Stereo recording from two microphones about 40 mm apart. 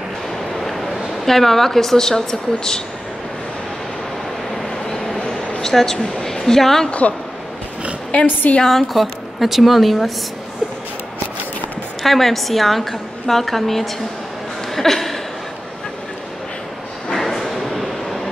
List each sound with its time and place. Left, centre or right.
0.6 s vehicle: centre
1.2 s speech: centre
4.6 s vehicle: centre
5.6 s a woman's voice: centre
6.9 s a woman's voice: left
8.6 s speech: centre
12.0 s speech: centre
14.8 s chuckle: centre
17.1 s a sound: centre